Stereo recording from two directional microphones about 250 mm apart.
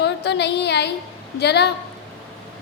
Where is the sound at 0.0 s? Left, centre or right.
Left.